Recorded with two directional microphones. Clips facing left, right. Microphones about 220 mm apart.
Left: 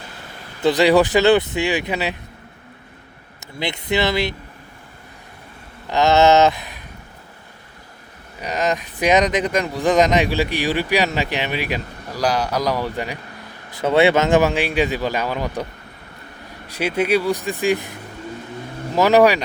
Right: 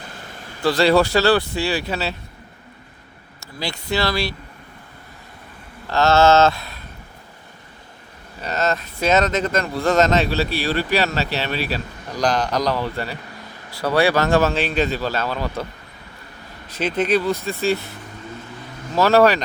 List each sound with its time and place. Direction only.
0.6 s speech: 20° left (ahead or behind)
3.4 s speech: 20° left (ahead or behind)
5.9 s speech: 15° left (ahead or behind)
8.4 s speech: 15° left (ahead or behind)
16.6 s speech: 10° left (ahead or behind)
18.9 s speech: 15° left (ahead or behind)